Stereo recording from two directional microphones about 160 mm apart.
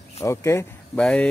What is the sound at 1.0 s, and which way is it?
Speech, 5° left (ahead or behind).